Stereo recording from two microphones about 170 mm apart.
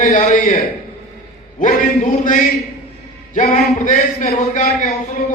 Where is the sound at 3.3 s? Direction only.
45° left (ahead or behind).